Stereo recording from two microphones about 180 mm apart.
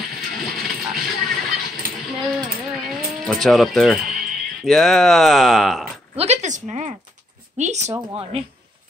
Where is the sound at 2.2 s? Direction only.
Centre (ahead or behind).